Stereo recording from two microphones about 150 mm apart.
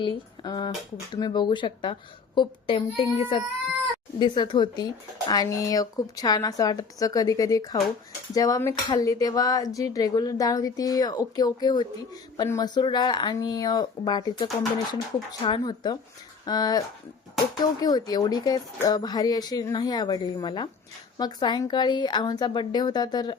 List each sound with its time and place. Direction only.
0.0 s speech: 30° left (ahead or behind)